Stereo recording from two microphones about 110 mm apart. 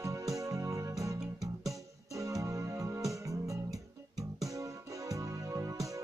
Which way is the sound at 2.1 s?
30° right (ahead or behind).